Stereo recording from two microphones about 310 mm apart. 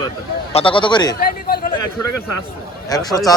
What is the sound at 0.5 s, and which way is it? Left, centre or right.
Speech, centre.